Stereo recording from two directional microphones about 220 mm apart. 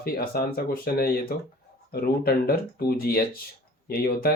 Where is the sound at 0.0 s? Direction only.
45° left (ahead or behind).